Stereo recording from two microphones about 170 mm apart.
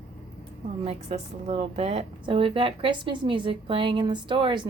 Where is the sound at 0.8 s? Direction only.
35° right (ahead or behind).